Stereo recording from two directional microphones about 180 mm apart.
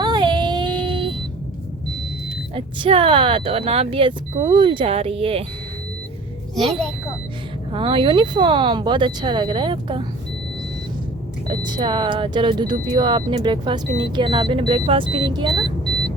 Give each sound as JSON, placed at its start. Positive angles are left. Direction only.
{"t": 0.0, "sound": "child singing", "side_deg": -25}
{"t": 2.6, "sound": "speech", "side_deg": -30}
{"t": 7.7, "sound": "speech", "side_deg": -30}
{"t": 11.4, "sound": "speech", "side_deg": -25}